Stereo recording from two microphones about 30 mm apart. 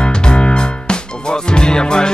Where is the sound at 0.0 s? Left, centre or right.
Left.